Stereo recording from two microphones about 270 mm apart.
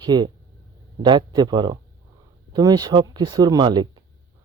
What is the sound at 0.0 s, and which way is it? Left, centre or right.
Speech, centre.